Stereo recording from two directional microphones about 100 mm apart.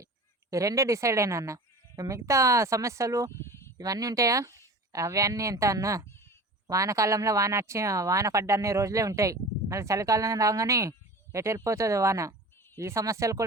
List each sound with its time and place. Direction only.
0.5 s speech: 35° right (ahead or behind)
3.3 s bleat: 25° left (ahead or behind)
3.8 s speech: 40° right (ahead or behind)